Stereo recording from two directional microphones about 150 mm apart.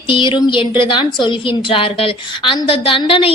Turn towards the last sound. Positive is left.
turn(degrees=35)  # may be behind; listen again after turning